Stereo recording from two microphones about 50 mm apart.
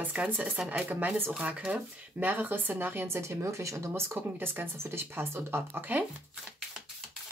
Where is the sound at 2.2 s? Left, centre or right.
Right.